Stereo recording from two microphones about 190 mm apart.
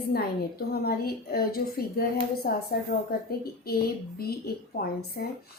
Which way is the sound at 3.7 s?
55° left (ahead or behind).